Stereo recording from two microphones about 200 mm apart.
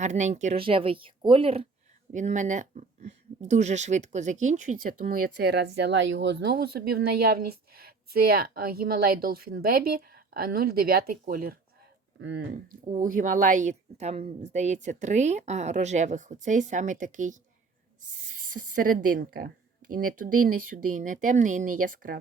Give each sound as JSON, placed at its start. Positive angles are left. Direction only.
{"t": 0.0, "sound": "speech", "side_deg": -35}
{"t": 2.1, "sound": "speech", "side_deg": -40}
{"t": 12.2, "sound": "speech", "side_deg": -70}
{"t": 12.8, "sound": "a woman's voice", "side_deg": -35}
{"t": 18.3, "sound": "a woman's voice", "side_deg": -45}